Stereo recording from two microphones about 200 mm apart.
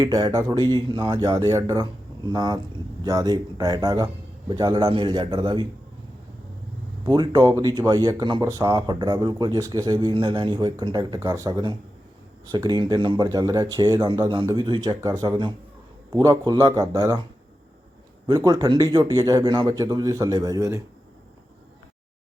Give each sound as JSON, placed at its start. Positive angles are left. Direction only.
{"t": 0.0, "sound": "speech", "side_deg": -20}
{"t": 7.0, "sound": "speech", "side_deg": -20}
{"t": 18.3, "sound": "speech", "side_deg": -20}